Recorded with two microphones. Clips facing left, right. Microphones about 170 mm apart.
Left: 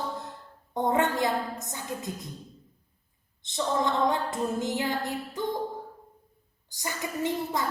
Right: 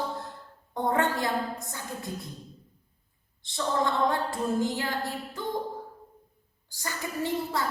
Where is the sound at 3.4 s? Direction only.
20° left (ahead or behind).